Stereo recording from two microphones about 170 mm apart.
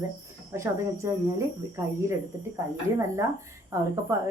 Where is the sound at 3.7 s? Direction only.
20° right (ahead or behind).